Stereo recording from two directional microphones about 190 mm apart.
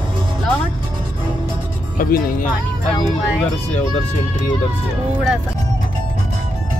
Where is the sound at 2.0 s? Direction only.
45° left (ahead or behind).